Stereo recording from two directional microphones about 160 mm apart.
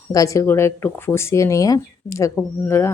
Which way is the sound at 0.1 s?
20° left (ahead or behind).